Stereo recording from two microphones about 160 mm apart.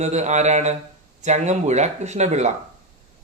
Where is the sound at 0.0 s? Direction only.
45° right (ahead or behind).